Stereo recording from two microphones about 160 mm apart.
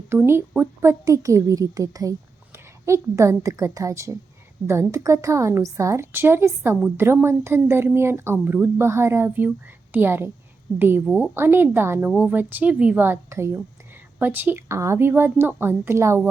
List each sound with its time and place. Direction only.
0.1 s a woman's voice: 15° right (ahead or behind)